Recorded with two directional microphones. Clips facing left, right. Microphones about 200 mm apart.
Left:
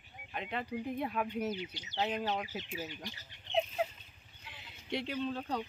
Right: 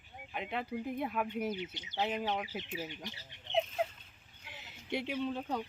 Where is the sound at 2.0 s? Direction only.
5° right (ahead or behind).